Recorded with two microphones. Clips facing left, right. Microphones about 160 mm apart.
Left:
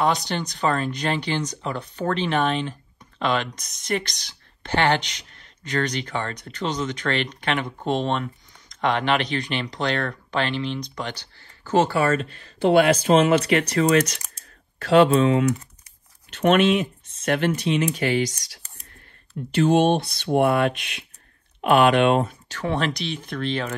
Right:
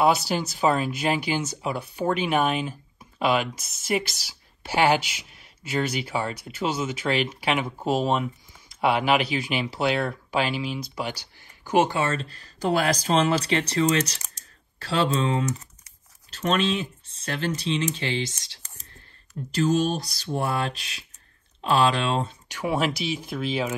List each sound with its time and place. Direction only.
0.0 s speech: 5° right (ahead or behind); by 18.6 s 25° right (ahead or behind)
19.5 s speech: 35° right (ahead or behind)
22.5 s speech: 10° right (ahead or behind)